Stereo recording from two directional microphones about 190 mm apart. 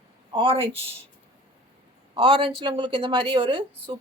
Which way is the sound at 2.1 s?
25° right (ahead or behind).